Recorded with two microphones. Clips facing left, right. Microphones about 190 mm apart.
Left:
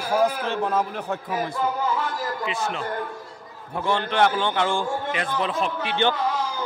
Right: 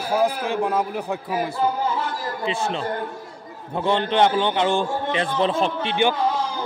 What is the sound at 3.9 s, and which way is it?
A man's voice, 20° right (ahead or behind).